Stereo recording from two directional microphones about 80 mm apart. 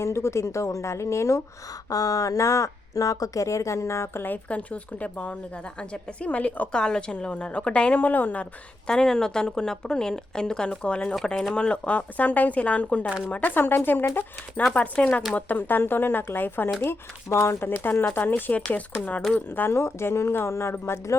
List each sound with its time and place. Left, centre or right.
0.0 s speech: left
1.9 s speech: left
4.4 s a woman's voice: centre
8.9 s a woman's voice: centre
13.1 s speech: centre
13.3 s speech: left
14.7 s a woman's voice: centre
19.5 s speech: left